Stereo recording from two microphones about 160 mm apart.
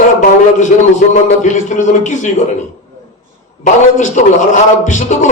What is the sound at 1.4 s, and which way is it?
Speech, 50° left (ahead or behind).